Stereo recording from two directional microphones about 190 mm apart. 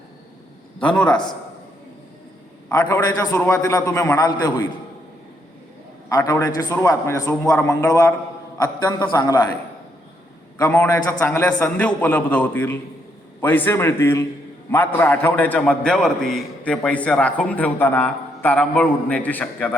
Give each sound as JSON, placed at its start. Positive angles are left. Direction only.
{"t": 0.8, "sound": "a man's voice", "side_deg": 5}
{"t": 2.9, "sound": "a man's voice", "side_deg": 20}
{"t": 6.1, "sound": "a man's voice", "side_deg": 20}
{"t": 10.6, "sound": "a man's voice", "side_deg": 10}